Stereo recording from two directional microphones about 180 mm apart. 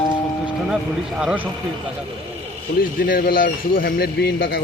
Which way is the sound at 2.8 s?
50° left (ahead or behind).